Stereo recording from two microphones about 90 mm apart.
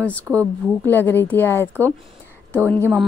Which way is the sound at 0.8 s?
20° left (ahead or behind).